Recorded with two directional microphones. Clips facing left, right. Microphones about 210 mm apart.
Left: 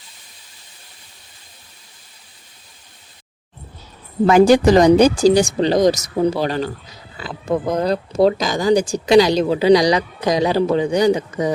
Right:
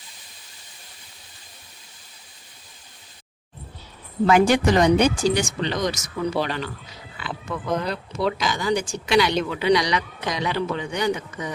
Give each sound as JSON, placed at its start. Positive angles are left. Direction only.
{"t": 4.3, "sound": "speech", "side_deg": 35}